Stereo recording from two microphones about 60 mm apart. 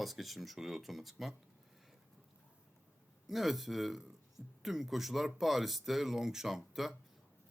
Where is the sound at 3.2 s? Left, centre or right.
Centre.